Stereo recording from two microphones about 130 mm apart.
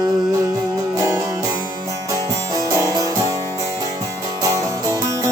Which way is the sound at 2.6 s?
25° right (ahead or behind).